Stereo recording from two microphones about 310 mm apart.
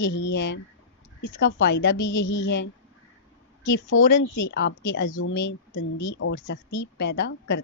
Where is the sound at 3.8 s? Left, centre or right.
Left.